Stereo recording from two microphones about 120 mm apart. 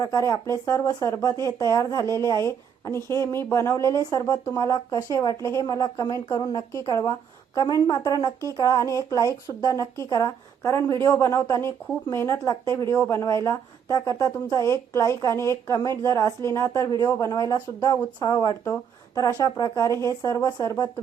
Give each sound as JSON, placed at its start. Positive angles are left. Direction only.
{"t": 0.0, "sound": "a woman's voice", "side_deg": 30}